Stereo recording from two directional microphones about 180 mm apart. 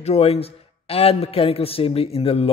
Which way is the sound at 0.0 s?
35° left (ahead or behind).